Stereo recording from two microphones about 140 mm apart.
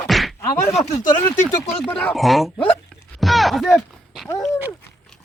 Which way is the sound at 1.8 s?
5° left (ahead or behind).